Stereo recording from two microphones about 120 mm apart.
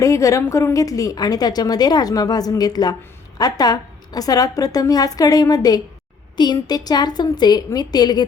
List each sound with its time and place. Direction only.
0.0 s a woman's voice: 25° left (ahead or behind)